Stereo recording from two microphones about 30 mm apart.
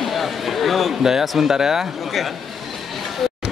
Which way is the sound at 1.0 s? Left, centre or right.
Centre.